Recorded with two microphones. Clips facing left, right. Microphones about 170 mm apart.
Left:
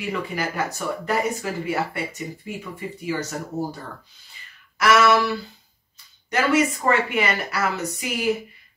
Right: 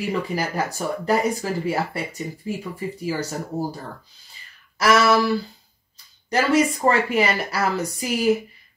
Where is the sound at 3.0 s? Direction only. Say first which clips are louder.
Even; 35° right (ahead or behind).